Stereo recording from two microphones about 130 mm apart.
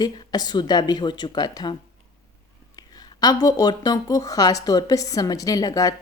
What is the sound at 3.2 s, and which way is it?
Speech, 30° left (ahead or behind).